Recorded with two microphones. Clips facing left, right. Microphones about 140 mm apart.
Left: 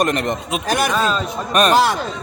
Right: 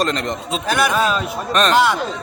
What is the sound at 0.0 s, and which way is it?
Speech, 20° left (ahead or behind).